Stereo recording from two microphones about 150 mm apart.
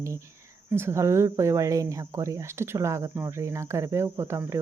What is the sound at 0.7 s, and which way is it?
A woman's voice, 15° right (ahead or behind).